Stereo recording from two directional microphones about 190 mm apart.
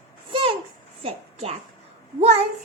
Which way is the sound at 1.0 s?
30° right (ahead or behind).